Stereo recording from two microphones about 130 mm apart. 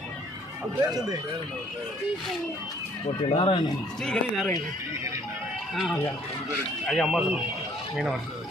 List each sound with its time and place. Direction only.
0.9 s speech: 30° right (ahead or behind)
3.2 s speech: 45° left (ahead or behind)
4.0 s speech: 5° left (ahead or behind)
6.8 s speech: centre (ahead or behind)